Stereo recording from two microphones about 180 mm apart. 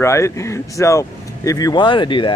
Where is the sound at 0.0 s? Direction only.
15° left (ahead or behind).